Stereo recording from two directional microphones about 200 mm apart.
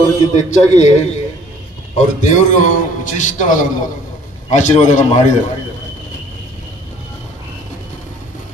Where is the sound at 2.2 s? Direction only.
40° left (ahead or behind).